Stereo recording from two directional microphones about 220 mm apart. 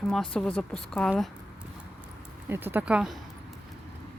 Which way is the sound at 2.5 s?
10° right (ahead or behind).